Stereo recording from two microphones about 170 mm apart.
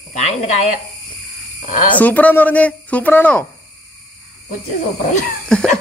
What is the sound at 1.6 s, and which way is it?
Speech, 45° left (ahead or behind).